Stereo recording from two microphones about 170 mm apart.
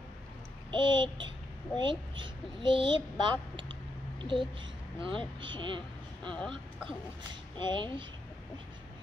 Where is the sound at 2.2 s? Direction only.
30° right (ahead or behind).